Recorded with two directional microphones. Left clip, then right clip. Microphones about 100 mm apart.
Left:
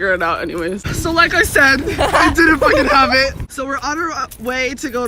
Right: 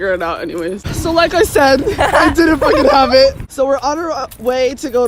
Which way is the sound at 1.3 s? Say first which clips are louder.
Right 1 dB; 35° right (ahead or behind).